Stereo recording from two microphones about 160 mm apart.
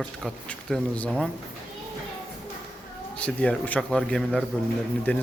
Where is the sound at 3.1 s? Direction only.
10° left (ahead or behind).